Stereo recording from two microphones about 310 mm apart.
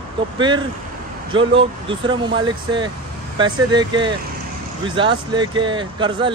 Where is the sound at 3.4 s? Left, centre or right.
Centre.